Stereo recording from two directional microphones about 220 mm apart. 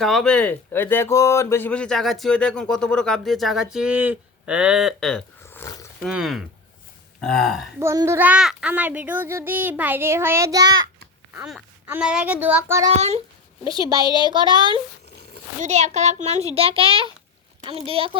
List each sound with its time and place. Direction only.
0.0 s speech: centre (ahead or behind)
6.0 s speech: centre (ahead or behind)
7.8 s a child's voice: 10° right (ahead or behind)
11.3 s a child's voice: 5° right (ahead or behind)
12.9 s a child's voice: 30° right (ahead or behind)
13.7 s a child's voice: 20° left (ahead or behind)
13.9 s a child's voice: 20° right (ahead or behind)
15.6 s a child's voice: 30° right (ahead or behind)